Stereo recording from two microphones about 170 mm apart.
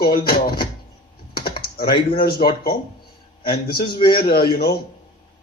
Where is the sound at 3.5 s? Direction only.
65° left (ahead or behind).